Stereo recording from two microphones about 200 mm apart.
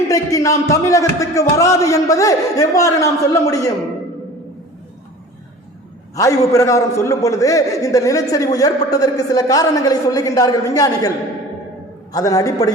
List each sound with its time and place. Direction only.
0.1 s a man's voice: 15° left (ahead or behind)
6.1 s a man's voice: 15° left (ahead or behind)
12.1 s a man's voice: 15° left (ahead or behind)